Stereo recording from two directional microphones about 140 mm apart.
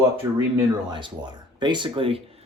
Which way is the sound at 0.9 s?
35° right (ahead or behind).